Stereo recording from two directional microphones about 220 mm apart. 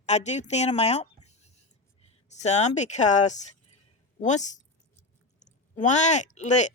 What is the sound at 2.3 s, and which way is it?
Speech, 30° left (ahead or behind).